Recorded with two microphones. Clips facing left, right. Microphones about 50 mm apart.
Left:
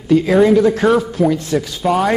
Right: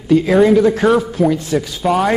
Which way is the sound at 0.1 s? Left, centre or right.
Centre.